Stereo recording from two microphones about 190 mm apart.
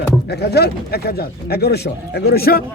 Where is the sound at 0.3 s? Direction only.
60° left (ahead or behind).